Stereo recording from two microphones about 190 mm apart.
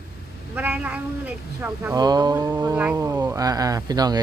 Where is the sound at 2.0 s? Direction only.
20° right (ahead or behind).